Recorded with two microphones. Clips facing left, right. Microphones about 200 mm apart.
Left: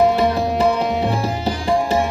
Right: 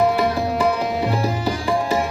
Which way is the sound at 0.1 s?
25° left (ahead or behind).